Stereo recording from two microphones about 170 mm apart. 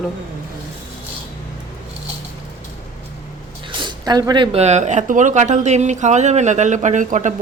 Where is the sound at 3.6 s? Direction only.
25° right (ahead or behind).